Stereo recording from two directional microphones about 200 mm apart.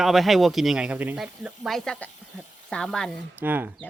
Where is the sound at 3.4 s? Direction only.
10° right (ahead or behind).